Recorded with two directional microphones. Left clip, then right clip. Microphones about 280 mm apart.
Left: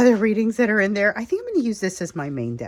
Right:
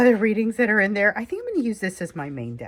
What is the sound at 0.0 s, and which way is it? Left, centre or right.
A woman's voice, centre.